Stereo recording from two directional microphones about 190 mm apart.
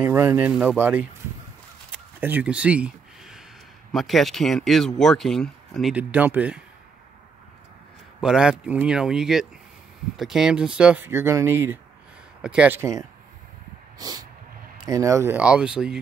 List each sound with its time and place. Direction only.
0.0 s speech: 15° right (ahead or behind)
1.9 s a sound: 10° right (ahead or behind)
3.9 s speech: centre (ahead or behind)
8.2 s speech: 5° right (ahead or behind)
13.9 s dog: 20° right (ahead or behind)
14.9 s speech: 15° right (ahead or behind)